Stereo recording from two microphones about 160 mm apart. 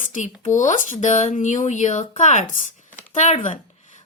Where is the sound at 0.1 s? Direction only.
50° left (ahead or behind).